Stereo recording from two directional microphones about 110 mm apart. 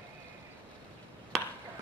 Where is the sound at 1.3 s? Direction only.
5° left (ahead or behind).